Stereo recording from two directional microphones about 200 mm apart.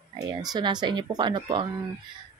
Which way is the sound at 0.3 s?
20° right (ahead or behind).